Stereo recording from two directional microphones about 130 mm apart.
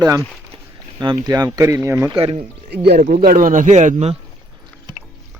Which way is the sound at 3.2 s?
90° right.